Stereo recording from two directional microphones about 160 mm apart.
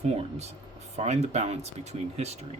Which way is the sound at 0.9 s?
40° right (ahead or behind).